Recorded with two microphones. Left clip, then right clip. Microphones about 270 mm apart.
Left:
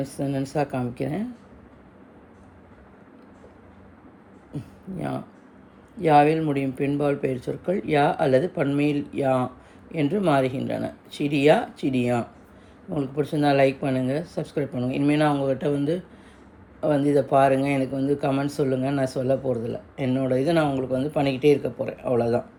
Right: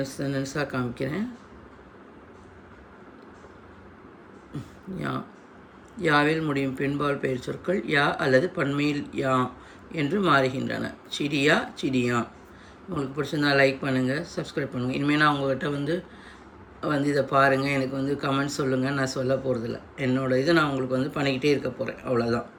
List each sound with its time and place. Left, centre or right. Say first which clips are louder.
0.0 s speech: left 1 dB; centre
4.5 s speech: left 2 dB; centre
6.6 s speech: left 1 dB; left
6.9 s speech: left 4 dB; centre